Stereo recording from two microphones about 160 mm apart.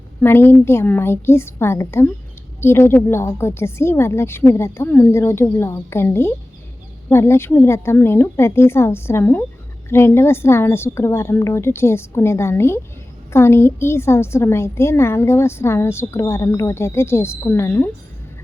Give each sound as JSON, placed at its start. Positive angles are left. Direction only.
{"t": 0.2, "sound": "a woman's voice", "side_deg": 15}